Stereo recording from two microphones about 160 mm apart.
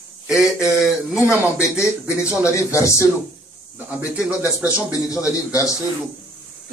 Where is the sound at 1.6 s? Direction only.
15° left (ahead or behind).